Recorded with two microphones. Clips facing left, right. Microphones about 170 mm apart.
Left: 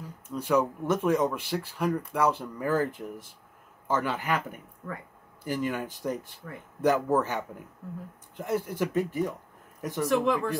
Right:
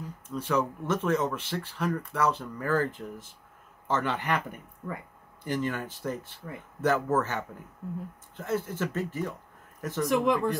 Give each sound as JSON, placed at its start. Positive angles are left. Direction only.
{"t": 0.4, "sound": "speech", "side_deg": 10}
{"t": 10.0, "sound": "speech", "side_deg": -15}